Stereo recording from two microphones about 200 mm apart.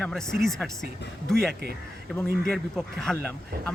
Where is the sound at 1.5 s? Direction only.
55° right (ahead or behind).